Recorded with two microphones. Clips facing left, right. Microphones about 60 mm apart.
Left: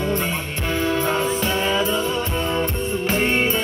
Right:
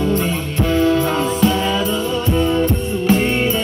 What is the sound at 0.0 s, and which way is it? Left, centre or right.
Music, left.